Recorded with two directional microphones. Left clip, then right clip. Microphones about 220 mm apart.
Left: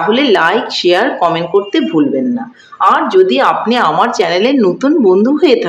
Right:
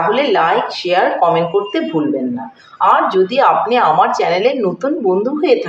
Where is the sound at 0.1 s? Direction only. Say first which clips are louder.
Left 6 dB; 50° left (ahead or behind).